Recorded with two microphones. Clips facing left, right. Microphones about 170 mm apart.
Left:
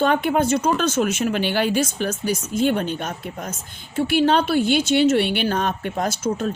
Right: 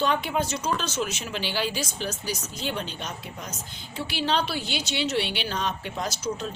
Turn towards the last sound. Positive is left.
turn(degrees=50)  # may be behind; listen again after turning